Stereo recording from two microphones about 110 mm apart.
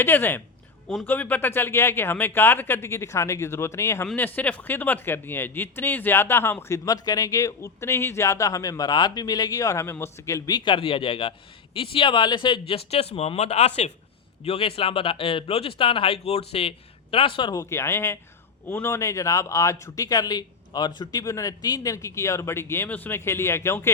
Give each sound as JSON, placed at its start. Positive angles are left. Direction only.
{"t": 0.0, "sound": "a man's voice", "side_deg": 20}
{"t": 4.0, "sound": "a man's voice", "side_deg": 15}
{"t": 14.4, "sound": "speech", "side_deg": 60}
{"t": 17.5, "sound": "a man's voice", "side_deg": 30}